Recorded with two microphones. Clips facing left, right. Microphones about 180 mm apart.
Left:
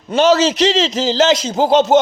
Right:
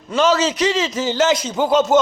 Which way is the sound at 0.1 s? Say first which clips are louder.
Left 4 dB; 70° left (ahead or behind).